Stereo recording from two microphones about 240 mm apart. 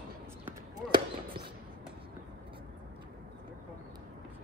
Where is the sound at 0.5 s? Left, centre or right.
Centre.